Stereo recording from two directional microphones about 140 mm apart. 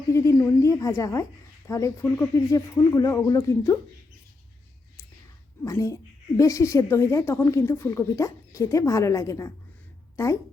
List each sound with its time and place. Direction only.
0.1 s a woman's voice: 20° left (ahead or behind)
5.6 s a woman's voice: 20° left (ahead or behind)